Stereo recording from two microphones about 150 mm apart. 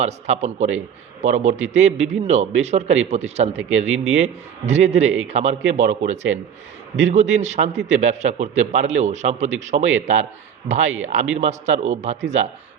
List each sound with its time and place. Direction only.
0.0 s a man's voice: 50° right (ahead or behind)